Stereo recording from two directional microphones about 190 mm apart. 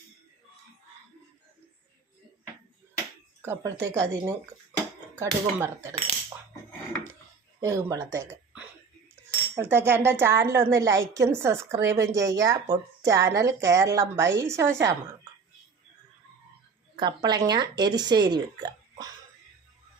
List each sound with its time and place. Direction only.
3.4 s speech: 15° right (ahead or behind)
7.6 s speech: 15° right (ahead or behind)
17.0 s speech: 20° right (ahead or behind)